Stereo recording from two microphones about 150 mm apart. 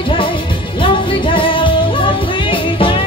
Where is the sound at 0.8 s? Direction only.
35° left (ahead or behind).